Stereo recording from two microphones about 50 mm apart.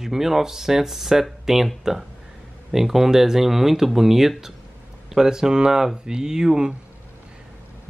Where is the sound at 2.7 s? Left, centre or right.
Centre.